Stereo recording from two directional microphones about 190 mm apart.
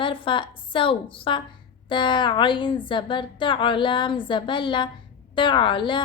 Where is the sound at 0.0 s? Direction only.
25° left (ahead or behind).